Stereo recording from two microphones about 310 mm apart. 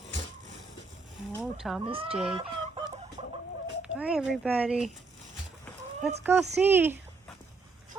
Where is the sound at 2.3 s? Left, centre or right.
Centre.